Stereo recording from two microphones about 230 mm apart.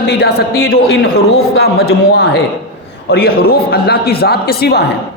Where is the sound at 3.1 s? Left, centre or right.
Left.